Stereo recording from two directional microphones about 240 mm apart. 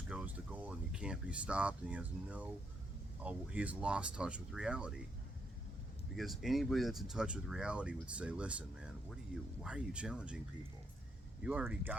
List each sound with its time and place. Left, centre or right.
0.1 s speech: centre
6.1 s speech: centre
11.4 s speech: centre